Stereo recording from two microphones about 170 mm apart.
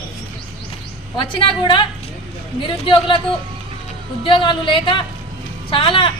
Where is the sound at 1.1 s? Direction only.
30° left (ahead or behind).